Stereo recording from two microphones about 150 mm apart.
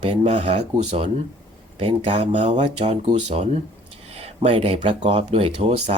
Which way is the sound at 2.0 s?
50° right (ahead or behind).